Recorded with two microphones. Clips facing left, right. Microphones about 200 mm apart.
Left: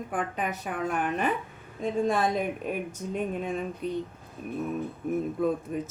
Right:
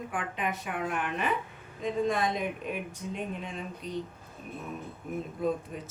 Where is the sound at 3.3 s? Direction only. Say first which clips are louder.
Left 7 dB; 50° left (ahead or behind).